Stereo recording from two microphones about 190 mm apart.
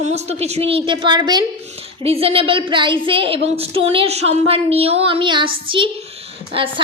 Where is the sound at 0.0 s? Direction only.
35° right (ahead or behind).